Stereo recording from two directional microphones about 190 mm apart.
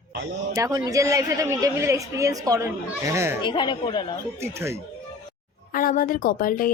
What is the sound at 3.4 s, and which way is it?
Speech, 25° left (ahead or behind).